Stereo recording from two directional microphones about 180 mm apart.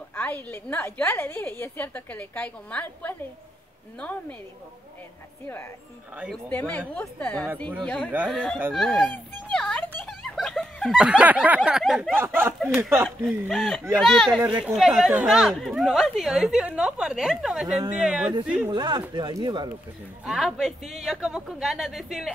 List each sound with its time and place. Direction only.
0.1 s a woman's voice: 10° left (ahead or behind)
6.5 s a woman's voice: 10° left (ahead or behind)
8.0 s speech: 10° right (ahead or behind)
8.3 s speech: centre (ahead or behind)
8.7 s a sound: centre (ahead or behind)
12.2 s speech: 15° right (ahead or behind)
13.5 s speech: centre (ahead or behind)
14.4 s speech: 10° right (ahead or behind)
18.7 s speech: 25° right (ahead or behind)
20.2 s speech: centre (ahead or behind)